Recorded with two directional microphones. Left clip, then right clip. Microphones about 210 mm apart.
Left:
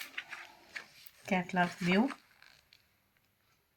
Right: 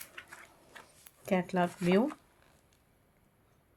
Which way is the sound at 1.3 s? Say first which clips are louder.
Right 1 dB; 55° right (ahead or behind).